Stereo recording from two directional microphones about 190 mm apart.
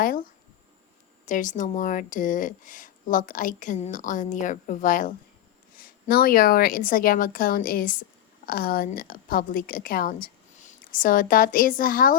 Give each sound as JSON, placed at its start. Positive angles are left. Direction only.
{"t": 0.0, "sound": "a woman's voice", "side_deg": 50}